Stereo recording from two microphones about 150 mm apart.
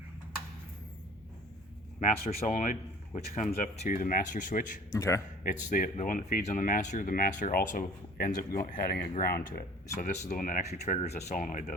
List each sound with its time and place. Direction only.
2.5 s speech: 55° left (ahead or behind)
4.9 s a man's voice: 20° left (ahead or behind)
5.4 s speech: 60° left (ahead or behind)
10.0 s speech: 55° left (ahead or behind)